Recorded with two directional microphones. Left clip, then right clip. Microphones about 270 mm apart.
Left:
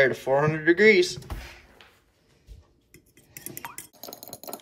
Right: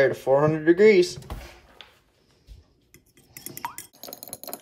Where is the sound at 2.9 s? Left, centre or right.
Centre.